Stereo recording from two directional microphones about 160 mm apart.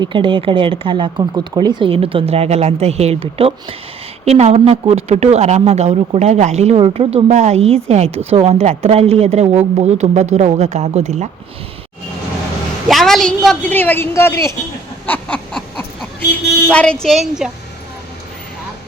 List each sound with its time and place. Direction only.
0.0 s a woman's voice: 30° right (ahead or behind)
12.9 s a woman's voice: centre (ahead or behind)
15.0 s a sound: 10° left (ahead or behind)
16.6 s a woman's voice: 5° left (ahead or behind)